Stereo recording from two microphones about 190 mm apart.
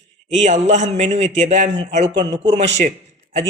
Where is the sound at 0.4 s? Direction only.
40° right (ahead or behind).